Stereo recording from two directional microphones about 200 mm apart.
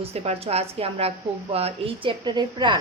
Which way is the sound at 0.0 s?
30° right (ahead or behind).